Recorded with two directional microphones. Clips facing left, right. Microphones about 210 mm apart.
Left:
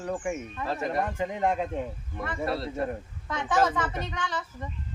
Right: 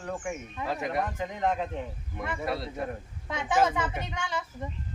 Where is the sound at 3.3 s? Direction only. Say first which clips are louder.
Even; 10° right (ahead or behind).